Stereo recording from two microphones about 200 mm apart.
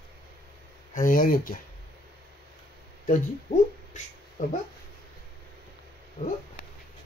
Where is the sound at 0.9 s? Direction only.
45° left (ahead or behind).